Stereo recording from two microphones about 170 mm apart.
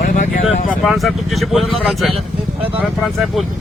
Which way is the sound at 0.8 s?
Centre (ahead or behind).